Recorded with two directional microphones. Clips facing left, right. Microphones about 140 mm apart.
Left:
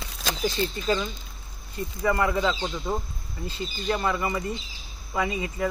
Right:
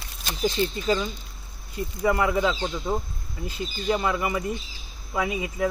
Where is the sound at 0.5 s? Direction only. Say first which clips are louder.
Right 3 dB; 20° right (ahead or behind).